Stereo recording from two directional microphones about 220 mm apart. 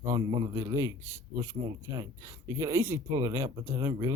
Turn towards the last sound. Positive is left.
turn(degrees=-15)  # may be behind; listen again after turning